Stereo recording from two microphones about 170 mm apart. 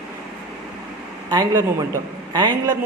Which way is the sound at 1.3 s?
25° right (ahead or behind).